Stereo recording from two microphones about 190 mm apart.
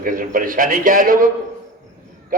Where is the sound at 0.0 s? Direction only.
45° right (ahead or behind).